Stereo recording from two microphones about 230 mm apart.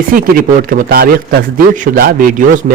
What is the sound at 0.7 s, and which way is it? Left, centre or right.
A man's voice, right.